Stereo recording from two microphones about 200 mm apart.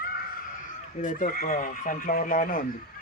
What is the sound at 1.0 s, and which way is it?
Speech, 40° left (ahead or behind).